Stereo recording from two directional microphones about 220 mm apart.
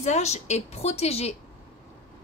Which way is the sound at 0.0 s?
30° left (ahead or behind).